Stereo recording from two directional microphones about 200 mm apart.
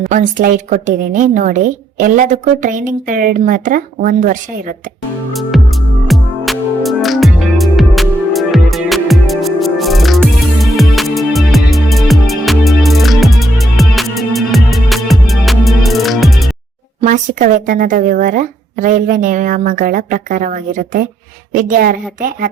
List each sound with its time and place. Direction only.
0.0 s a woman's voice: 40° right (ahead or behind)
5.3 s music: centre (ahead or behind)
17.0 s a woman's voice: 40° right (ahead or behind)